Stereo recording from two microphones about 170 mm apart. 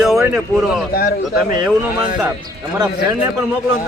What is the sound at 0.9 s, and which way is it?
Speech, 50° left (ahead or behind).